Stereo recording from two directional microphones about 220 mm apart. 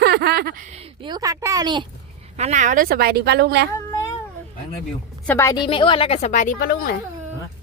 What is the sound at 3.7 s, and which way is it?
Cat, 15° left (ahead or behind).